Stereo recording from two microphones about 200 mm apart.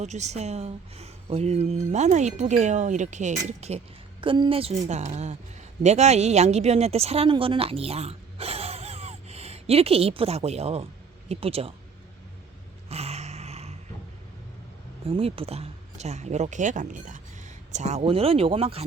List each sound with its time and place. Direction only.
0.0 s a woman's voice: 35° right (ahead or behind)
12.9 s a sound: 30° right (ahead or behind)
15.0 s speech: 30° right (ahead or behind)